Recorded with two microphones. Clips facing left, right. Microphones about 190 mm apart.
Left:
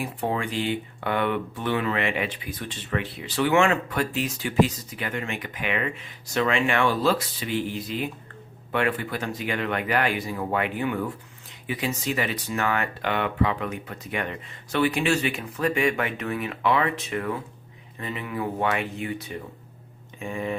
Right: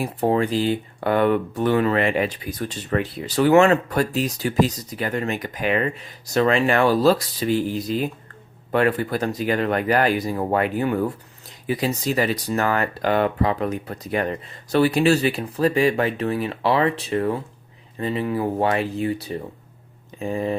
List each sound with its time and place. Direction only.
0.0 s speech: 35° right (ahead or behind)